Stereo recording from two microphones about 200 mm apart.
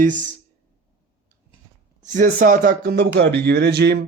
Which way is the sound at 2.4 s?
45° right (ahead or behind).